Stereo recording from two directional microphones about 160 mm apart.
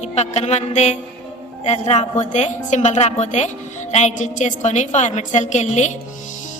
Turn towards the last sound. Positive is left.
turn(degrees=45)  # may be behind; listen again after turning